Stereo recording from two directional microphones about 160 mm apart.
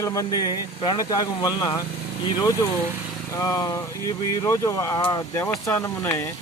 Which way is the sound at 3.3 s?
20° left (ahead or behind).